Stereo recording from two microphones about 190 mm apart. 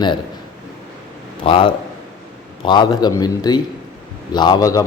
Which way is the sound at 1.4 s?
25° left (ahead or behind).